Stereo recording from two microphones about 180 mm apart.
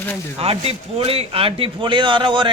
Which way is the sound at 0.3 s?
35° right (ahead or behind).